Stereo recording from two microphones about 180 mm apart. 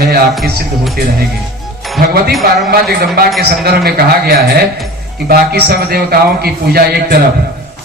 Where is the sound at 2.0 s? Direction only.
55° right (ahead or behind).